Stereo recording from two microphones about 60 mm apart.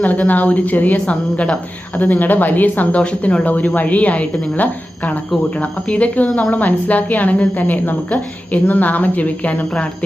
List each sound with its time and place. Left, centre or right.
0.0 s a woman's voice: left
3.0 s a woman's voice: centre